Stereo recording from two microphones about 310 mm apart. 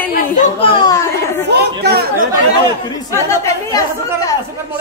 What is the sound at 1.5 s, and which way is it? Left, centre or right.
Chatter, right.